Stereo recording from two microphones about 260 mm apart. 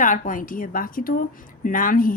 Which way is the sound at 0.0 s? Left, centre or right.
Left.